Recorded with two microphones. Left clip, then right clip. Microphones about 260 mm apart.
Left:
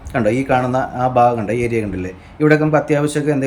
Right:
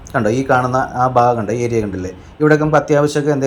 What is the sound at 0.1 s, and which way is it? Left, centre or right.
A man's voice, centre.